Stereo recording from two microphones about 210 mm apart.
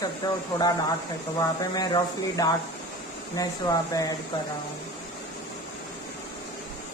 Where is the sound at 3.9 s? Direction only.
15° left (ahead or behind).